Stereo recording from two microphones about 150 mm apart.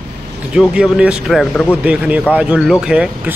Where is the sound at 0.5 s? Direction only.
5° right (ahead or behind).